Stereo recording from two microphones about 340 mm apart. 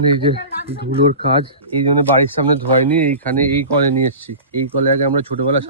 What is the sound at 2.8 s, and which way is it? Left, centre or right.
Speech, centre.